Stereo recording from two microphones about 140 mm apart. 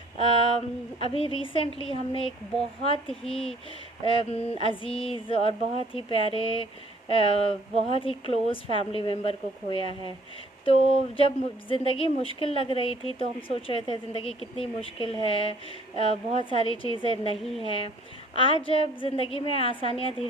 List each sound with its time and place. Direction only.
0.2 s a woman's voice: 45° left (ahead or behind)